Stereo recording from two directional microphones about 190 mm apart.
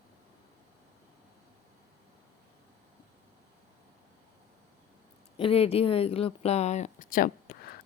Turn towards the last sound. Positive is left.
turn(degrees=50)  # may be behind; listen again after turning